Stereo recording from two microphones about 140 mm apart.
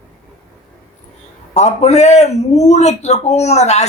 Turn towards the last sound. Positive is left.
turn(degrees=55)  # may be behind; listen again after turning